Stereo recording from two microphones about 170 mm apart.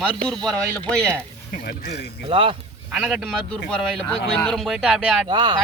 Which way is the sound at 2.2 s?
30° right (ahead or behind).